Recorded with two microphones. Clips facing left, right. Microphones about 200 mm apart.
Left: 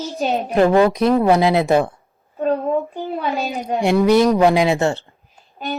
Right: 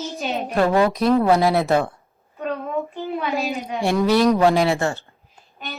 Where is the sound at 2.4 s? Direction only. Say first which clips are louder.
Left 8 dB; 35° left (ahead or behind).